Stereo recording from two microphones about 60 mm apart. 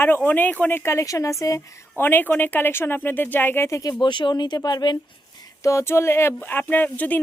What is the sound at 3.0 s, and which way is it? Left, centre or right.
Speech, left.